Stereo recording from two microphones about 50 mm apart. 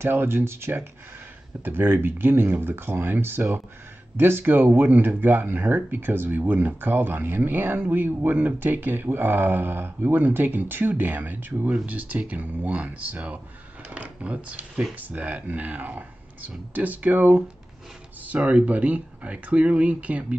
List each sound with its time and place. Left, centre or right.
0.0 s speech: right
1.6 s speech: right
11.7 s speech: right